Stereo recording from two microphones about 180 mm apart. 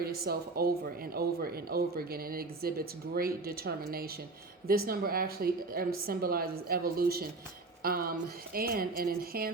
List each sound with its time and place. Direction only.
0.0 s speech: 60° right (ahead or behind)